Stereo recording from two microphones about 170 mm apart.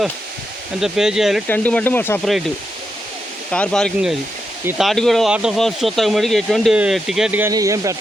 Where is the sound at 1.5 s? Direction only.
10° left (ahead or behind).